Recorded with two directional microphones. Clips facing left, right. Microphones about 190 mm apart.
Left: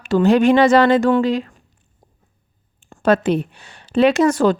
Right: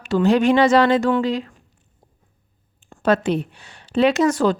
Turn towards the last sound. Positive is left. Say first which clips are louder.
# left 3 dB
turn(degrees=55)  # may be behind; listen again after turning